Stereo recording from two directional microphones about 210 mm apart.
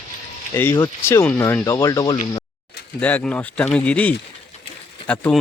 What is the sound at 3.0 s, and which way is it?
Speech, 5° left (ahead or behind).